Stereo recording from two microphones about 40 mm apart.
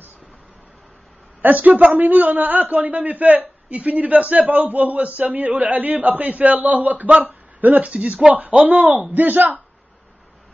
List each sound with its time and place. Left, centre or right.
1.4 s a man's voice: right